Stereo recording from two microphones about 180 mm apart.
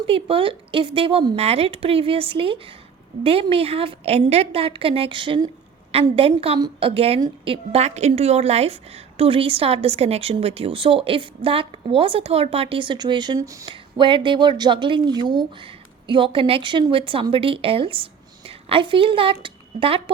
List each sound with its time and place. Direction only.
0.1 s a woman's voice: 30° right (ahead or behind)